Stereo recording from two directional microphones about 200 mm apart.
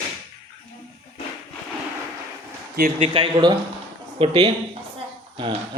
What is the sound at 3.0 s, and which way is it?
Speech, 25° right (ahead or behind).